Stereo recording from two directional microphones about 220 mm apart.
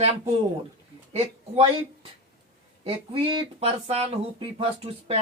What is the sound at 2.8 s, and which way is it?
Speech, 25° right (ahead or behind).